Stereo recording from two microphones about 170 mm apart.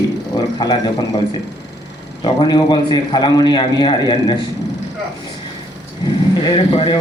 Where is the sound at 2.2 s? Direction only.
25° left (ahead or behind).